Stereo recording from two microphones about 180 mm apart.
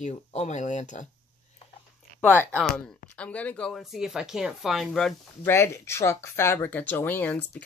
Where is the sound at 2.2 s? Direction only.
10° left (ahead or behind).